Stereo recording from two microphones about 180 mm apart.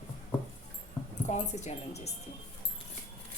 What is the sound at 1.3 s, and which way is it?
Speech, 40° left (ahead or behind).